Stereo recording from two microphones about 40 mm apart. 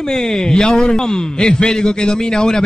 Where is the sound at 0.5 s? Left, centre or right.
Centre.